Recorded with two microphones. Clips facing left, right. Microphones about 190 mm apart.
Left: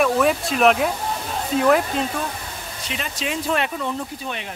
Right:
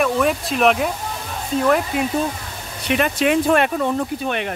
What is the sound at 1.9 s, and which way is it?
Speech, 10° right (ahead or behind).